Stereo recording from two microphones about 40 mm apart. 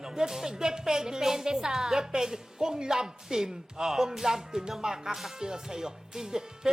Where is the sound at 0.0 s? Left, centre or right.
Centre.